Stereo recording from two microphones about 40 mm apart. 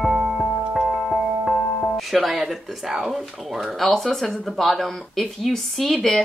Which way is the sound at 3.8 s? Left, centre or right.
Centre.